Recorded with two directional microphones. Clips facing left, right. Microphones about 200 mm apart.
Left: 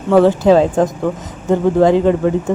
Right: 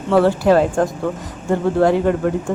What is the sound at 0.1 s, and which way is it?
Speech, 15° left (ahead or behind).